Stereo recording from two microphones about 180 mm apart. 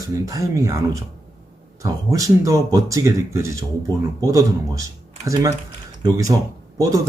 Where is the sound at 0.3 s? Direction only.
20° right (ahead or behind).